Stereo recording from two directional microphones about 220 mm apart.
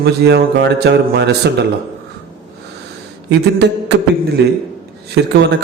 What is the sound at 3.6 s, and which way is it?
A man's voice, 50° right (ahead or behind).